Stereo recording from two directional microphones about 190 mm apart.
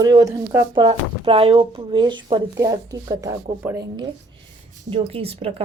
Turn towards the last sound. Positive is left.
turn(degrees=-30)  # may be behind; listen again after turning